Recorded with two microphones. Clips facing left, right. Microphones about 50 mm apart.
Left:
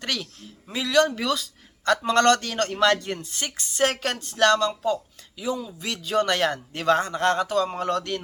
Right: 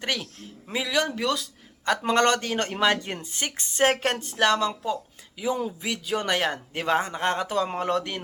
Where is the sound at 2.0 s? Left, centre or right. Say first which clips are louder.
Left 2 dB; centre.